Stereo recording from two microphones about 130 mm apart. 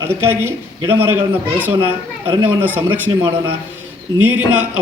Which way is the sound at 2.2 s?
15° right (ahead or behind).